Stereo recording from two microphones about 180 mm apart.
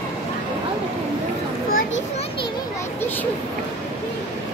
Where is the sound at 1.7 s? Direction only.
50° left (ahead or behind).